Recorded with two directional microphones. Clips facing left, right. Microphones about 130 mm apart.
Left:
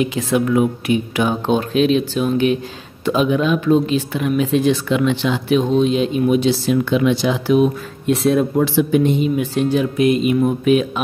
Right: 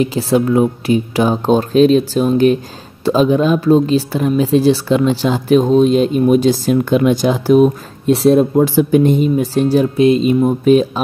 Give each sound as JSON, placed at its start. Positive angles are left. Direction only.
{"t": 0.0, "sound": "speech", "side_deg": -35}